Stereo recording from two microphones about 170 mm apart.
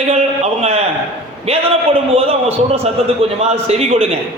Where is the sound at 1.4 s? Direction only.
35° right (ahead or behind).